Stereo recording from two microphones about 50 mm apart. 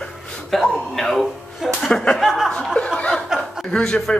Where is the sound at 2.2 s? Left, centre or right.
Centre.